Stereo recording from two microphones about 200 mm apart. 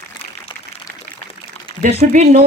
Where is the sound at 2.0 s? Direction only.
35° right (ahead or behind).